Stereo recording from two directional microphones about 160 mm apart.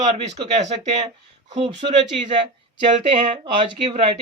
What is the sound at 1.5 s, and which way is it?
Speech, 30° right (ahead or behind).